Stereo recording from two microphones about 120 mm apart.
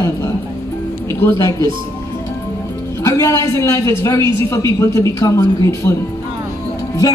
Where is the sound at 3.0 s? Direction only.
25° left (ahead or behind).